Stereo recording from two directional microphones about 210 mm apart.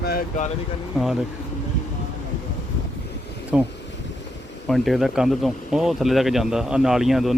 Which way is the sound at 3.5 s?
5° right (ahead or behind).